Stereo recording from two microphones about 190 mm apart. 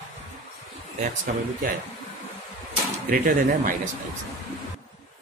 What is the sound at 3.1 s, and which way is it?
Speech, 55° right (ahead or behind).